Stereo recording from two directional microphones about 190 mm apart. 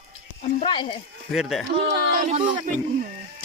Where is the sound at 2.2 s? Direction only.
35° right (ahead or behind).